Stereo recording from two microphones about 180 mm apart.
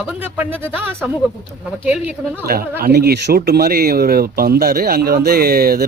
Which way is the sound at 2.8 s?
60° right (ahead or behind).